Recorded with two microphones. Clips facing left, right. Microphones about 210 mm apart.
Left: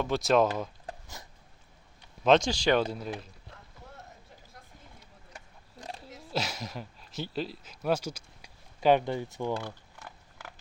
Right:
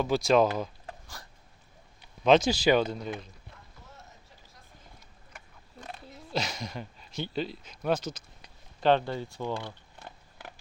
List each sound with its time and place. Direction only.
0.0 s speech: centre (ahead or behind)
0.9 s a sound: 20° left (ahead or behind)
2.2 s speech: 5° right (ahead or behind)
2.8 s speech: 5° left (ahead or behind)
6.3 s speech: 5° left (ahead or behind)